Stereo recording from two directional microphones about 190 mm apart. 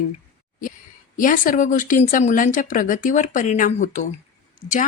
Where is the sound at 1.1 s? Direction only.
45° left (ahead or behind).